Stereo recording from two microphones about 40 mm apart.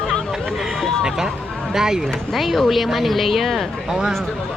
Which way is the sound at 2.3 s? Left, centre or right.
Centre.